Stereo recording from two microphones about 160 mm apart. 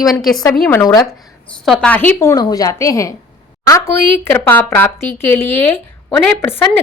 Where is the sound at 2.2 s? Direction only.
20° left (ahead or behind).